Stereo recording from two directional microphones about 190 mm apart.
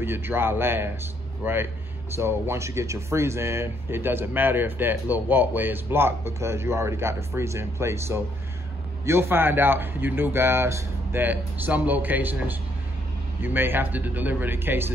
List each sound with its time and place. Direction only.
0.0 s speech: 10° right (ahead or behind)